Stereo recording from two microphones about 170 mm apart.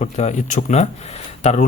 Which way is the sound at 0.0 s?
45° left (ahead or behind).